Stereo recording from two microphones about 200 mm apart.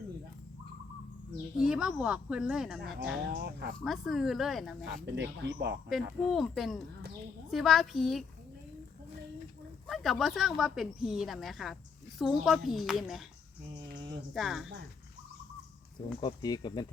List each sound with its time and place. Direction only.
1.5 s speech: 5° right (ahead or behind)
3.3 s speech: 55° right (ahead or behind)
3.8 s speech: centre (ahead or behind)
5.0 s speech: 60° right (ahead or behind)
5.9 s speech: centre (ahead or behind)
9.8 s speech: centre (ahead or behind)
14.3 s speech: centre (ahead or behind)
16.2 s speech: 20° left (ahead or behind)